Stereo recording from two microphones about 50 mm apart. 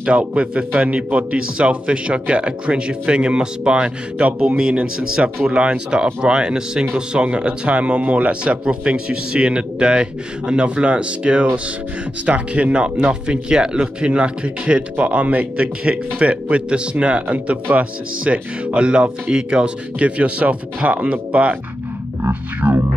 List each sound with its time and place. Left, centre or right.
0.0 s speech: right